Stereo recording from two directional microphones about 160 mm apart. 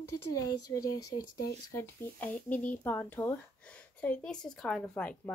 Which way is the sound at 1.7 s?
15° left (ahead or behind).